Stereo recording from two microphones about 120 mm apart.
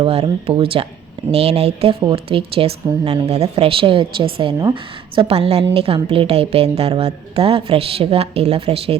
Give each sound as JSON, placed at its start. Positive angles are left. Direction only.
{"t": 0.0, "sound": "a woman's voice", "side_deg": -55}